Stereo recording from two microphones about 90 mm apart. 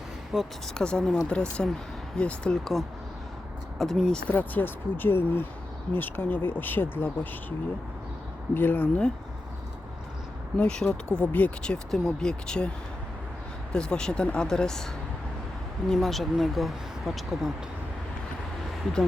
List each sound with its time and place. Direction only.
0.3 s speech: 5° right (ahead or behind)
0.7 s speech: 10° left (ahead or behind)
4.3 s speech: 20° left (ahead or behind)
8.5 s speech: 20° left (ahead or behind)
10.6 s speech: 10° left (ahead or behind)
13.7 s speech: 10° left (ahead or behind)
15.9 s speech: centre (ahead or behind)